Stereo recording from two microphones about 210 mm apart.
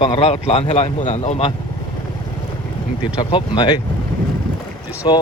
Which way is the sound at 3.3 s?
25° left (ahead or behind).